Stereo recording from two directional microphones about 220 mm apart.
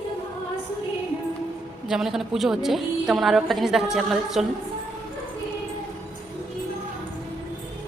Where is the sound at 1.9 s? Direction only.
Centre (ahead or behind).